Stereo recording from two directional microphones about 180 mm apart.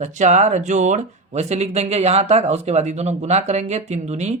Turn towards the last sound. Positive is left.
turn(degrees=-40)  # may be behind; listen again after turning